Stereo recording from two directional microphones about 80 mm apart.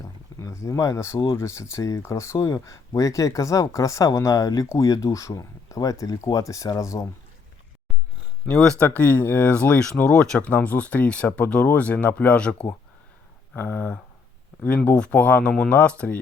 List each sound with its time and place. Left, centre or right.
0.0 s a sound: left
1.4 s speech: left
9.0 s speech: left